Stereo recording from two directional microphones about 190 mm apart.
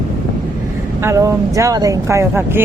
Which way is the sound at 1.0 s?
15° right (ahead or behind).